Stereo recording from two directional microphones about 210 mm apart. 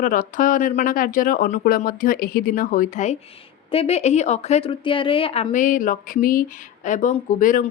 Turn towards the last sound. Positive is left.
turn(degrees=40)  # may be behind; listen again after turning